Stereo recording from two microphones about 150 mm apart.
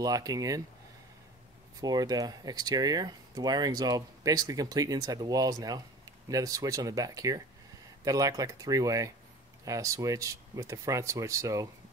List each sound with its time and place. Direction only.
0.0 s speech: 25° right (ahead or behind)
1.8 s speech: 25° right (ahead or behind)